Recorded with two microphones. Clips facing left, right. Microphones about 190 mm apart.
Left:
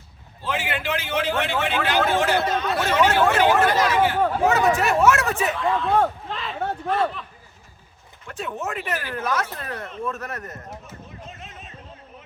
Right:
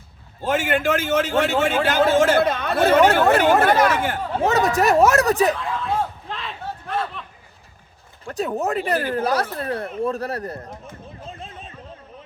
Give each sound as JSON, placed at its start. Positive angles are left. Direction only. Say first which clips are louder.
{"t": 0.4, "sound": "a man's voice", "louder": "right 7 dB", "side_deg": -45}
{"t": 4.4, "sound": "speech", "louder": "right 4 dB", "side_deg": -40}
{"t": 5.5, "sound": "a man's voice", "louder": "left 5 dB", "side_deg": 0}
{"t": 6.2, "sound": "a sound", "louder": "left 1 dB", "side_deg": 0}
{"t": 6.8, "sound": "a man's voice", "louder": "left 3 dB", "side_deg": 0}
{"t": 8.2, "sound": "speech", "louder": "right 6 dB", "side_deg": -40}
{"t": 11.3, "sound": "a sound", "louder": "right 4 dB", "side_deg": -30}